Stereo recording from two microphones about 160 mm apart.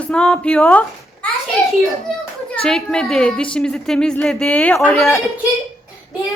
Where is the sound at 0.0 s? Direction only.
5° left (ahead or behind).